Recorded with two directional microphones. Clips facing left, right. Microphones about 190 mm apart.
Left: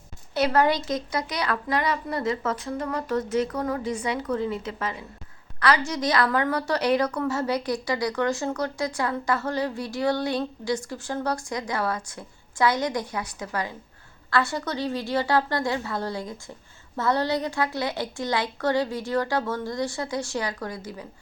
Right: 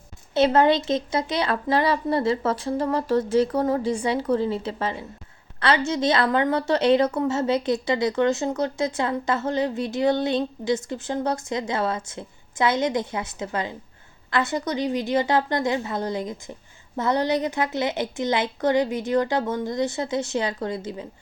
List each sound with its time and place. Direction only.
0.3 s a woman's voice: 25° right (ahead or behind)